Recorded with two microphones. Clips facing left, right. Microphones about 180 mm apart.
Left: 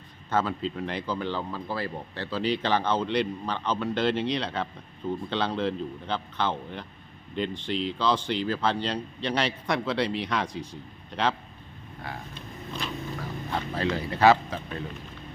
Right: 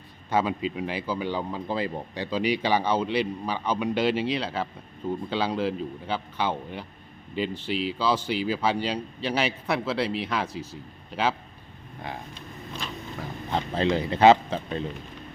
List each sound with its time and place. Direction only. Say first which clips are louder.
0.3 s speech: right 2 dB; 10° right (ahead or behind)
13.5 s speech: right 4 dB; 20° right (ahead or behind)